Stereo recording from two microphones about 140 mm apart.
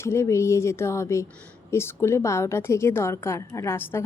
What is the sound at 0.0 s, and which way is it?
A woman's voice, 20° left (ahead or behind).